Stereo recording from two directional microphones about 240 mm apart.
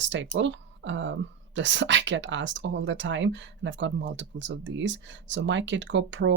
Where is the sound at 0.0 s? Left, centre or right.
Right.